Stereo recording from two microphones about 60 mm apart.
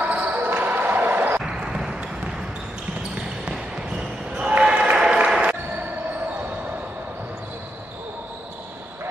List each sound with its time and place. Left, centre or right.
0.0 s basketball bounce: right
1.4 s a sound: centre
3.4 s basketball bounce: centre
5.0 s applause: centre